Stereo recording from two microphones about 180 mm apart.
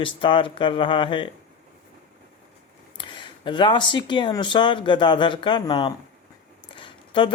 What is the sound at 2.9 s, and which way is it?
Speech, 25° left (ahead or behind).